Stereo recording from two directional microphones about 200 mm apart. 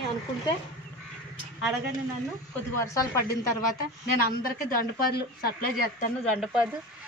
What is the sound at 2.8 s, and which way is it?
Speech, 15° left (ahead or behind).